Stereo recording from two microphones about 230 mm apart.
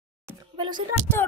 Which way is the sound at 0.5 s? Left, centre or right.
Centre.